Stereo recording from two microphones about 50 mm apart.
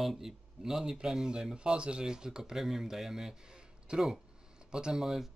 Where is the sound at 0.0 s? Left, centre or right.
Centre.